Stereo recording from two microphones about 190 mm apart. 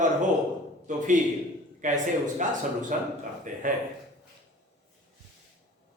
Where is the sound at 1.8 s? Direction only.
40° right (ahead or behind).